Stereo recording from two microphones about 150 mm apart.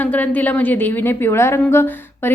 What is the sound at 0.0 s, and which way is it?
A woman's voice, 10° left (ahead or behind).